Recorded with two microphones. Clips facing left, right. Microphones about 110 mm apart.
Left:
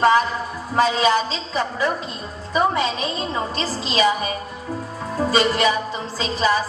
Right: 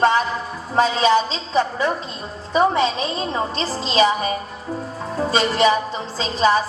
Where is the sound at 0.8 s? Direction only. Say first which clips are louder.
Right 2 dB; 30° right (ahead or behind).